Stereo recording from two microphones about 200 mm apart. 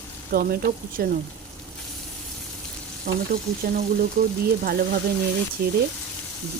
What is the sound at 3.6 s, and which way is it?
Speech, 45° right (ahead or behind).